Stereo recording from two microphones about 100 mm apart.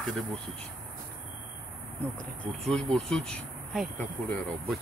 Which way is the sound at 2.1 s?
5° left (ahead or behind).